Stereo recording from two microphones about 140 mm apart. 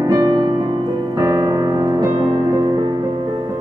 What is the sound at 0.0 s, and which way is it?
Music, 25° right (ahead or behind).